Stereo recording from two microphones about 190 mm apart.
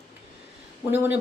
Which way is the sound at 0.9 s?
10° right (ahead or behind).